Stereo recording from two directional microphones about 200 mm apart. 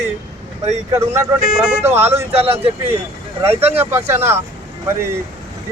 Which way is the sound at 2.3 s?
30° right (ahead or behind).